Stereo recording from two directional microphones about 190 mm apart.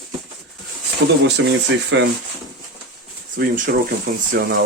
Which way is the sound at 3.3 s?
45° right (ahead or behind).